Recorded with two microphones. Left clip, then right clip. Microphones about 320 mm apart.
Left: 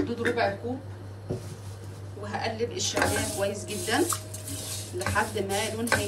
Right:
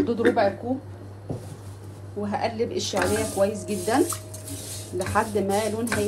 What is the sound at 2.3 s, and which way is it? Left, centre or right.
Speech, centre.